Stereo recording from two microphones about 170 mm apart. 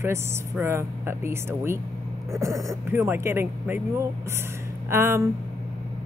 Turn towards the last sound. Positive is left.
turn(degrees=-15)  # may be behind; listen again after turning